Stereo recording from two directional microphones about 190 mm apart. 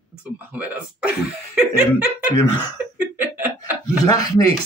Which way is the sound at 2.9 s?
10° right (ahead or behind).